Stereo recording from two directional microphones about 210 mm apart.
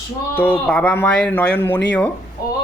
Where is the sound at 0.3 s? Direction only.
10° left (ahead or behind).